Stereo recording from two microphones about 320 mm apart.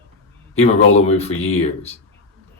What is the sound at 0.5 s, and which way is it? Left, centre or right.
Speech, centre.